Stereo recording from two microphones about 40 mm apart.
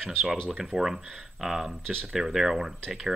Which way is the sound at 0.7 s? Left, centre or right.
Right.